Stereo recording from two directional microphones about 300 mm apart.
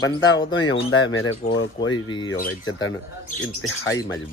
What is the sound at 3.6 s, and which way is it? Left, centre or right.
Speech, left.